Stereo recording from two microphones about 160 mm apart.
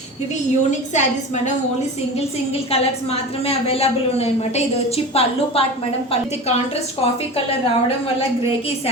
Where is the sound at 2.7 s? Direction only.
40° left (ahead or behind).